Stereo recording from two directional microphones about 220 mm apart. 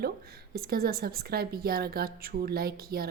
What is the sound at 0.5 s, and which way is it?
A woman's voice, 45° right (ahead or behind).